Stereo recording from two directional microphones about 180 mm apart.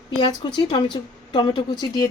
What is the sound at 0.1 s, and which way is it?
Speech, 25° left (ahead or behind).